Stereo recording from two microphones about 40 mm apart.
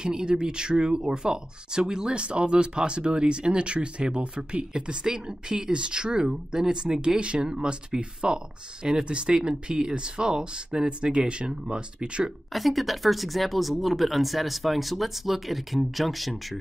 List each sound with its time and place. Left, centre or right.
0.0 s speech: right
12.5 s speech: centre